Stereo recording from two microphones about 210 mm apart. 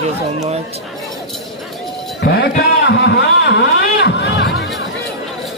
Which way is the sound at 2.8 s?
55° left (ahead or behind).